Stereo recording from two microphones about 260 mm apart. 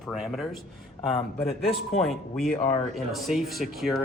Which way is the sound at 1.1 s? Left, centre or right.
Left.